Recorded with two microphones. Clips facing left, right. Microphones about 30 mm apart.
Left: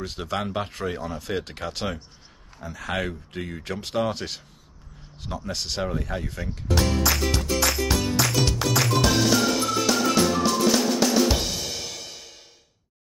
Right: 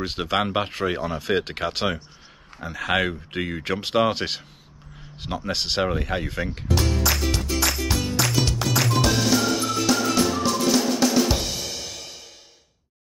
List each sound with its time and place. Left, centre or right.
0.0 s speech: right
6.7 s music: centre